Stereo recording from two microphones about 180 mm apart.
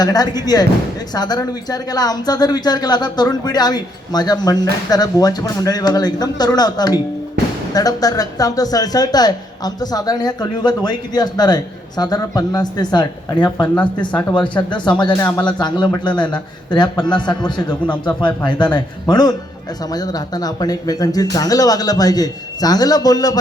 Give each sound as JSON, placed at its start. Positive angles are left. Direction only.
{"t": 0.0, "sound": "speech", "side_deg": 20}
{"t": 14.1, "sound": "speech", "side_deg": 10}
{"t": 14.3, "sound": "speech", "side_deg": 25}